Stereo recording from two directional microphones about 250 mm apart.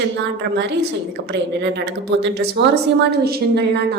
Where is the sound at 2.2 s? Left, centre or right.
Right.